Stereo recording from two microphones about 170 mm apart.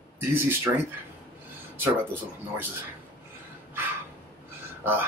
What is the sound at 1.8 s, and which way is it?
Speech, 10° right (ahead or behind).